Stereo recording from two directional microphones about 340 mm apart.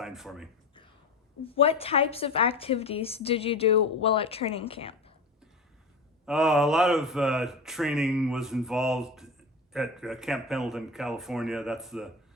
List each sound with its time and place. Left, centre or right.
0.0 s speech: centre
1.5 s a woman's voice: centre
6.2 s speech: centre